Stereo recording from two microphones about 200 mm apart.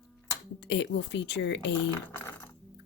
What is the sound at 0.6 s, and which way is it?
Speech, 60° left (ahead or behind).